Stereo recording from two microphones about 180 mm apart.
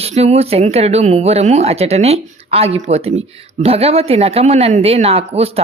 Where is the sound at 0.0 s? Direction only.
35° right (ahead or behind).